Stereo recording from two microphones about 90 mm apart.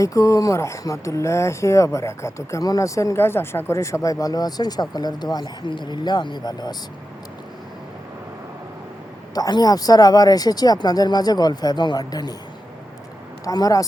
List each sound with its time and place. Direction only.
0.0 s speech: 35° left (ahead or behind)
9.3 s speech: 45° left (ahead or behind)
13.4 s speech: 40° left (ahead or behind)